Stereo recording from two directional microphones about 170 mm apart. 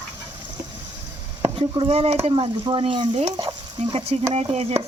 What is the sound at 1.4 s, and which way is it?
Speech, 30° right (ahead or behind).